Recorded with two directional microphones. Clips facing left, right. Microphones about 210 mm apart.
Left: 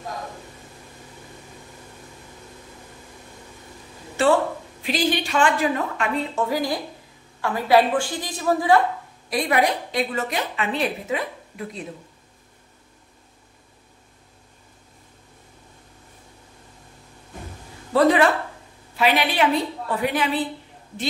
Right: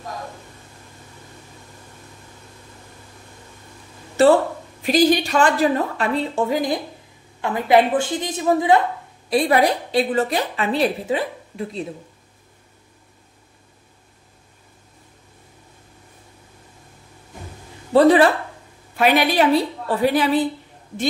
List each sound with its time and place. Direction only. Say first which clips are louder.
4.2 s a woman's voice: right 5 dB; 40° right (ahead or behind); by 8.8 s 20° right (ahead or behind)
9.3 s a woman's voice: right 4 dB; 30° right (ahead or behind)
17.9 s a woman's voice: right 4 dB; 30° right (ahead or behind)
18.9 s a woman's voice: right 4 dB; 45° right (ahead or behind)